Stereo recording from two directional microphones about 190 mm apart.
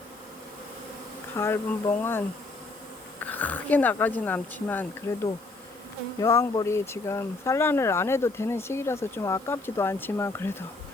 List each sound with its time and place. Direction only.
1.4 s speech: 10° left (ahead or behind)
3.2 s speech: 10° left (ahead or behind)